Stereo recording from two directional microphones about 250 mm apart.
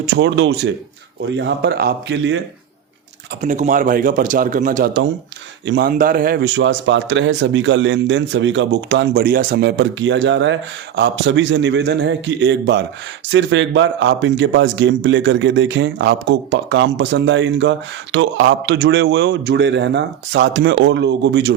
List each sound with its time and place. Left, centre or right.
0.2 s a man's voice: right
3.4 s a man's voice: right